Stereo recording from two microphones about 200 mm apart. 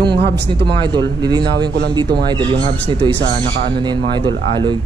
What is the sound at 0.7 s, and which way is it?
Speech, 20° right (ahead or behind).